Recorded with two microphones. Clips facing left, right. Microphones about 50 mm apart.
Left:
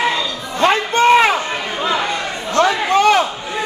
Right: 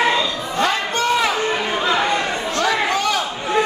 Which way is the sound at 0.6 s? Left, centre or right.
Left.